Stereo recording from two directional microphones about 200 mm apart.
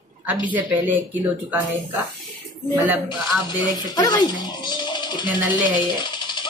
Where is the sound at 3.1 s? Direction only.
20° left (ahead or behind).